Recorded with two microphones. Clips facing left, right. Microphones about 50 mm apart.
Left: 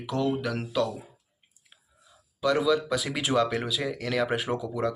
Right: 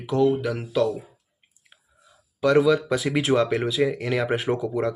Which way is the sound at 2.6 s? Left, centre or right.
Right.